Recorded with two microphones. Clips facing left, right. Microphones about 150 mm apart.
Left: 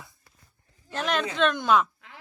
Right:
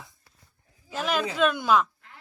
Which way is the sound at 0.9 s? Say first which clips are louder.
Even; 5° right (ahead or behind).